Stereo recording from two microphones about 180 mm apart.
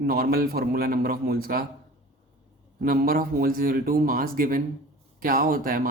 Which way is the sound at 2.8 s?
55° right (ahead or behind).